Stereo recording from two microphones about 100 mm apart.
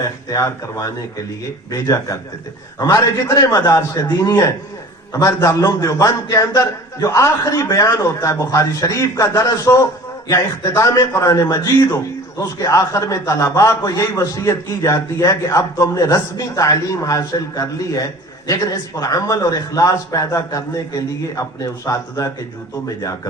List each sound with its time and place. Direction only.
0.0 s a man's voice: 35° left (ahead or behind)